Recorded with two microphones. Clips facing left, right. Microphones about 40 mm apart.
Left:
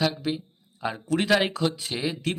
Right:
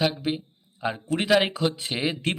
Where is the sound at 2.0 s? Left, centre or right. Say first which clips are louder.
Right 2 dB; right.